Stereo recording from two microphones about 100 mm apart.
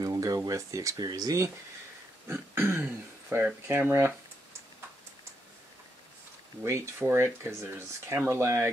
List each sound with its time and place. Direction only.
0.0 s a sound: 35° right (ahead or behind)
0.5 s speech: 35° right (ahead or behind)
2.2 s speech: 25° right (ahead or behind)
7.0 s speech: 25° right (ahead or behind)